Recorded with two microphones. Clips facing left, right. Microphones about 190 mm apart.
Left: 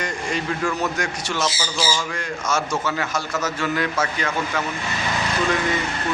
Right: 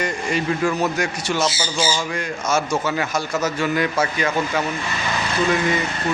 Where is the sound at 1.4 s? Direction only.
30° right (ahead or behind).